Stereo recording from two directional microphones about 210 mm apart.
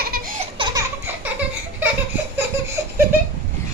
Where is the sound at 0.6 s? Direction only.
25° right (ahead or behind).